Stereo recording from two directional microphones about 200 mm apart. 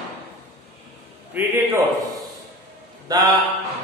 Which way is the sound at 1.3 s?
10° right (ahead or behind).